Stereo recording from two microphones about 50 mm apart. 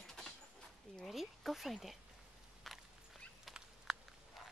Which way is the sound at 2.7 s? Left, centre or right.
Centre.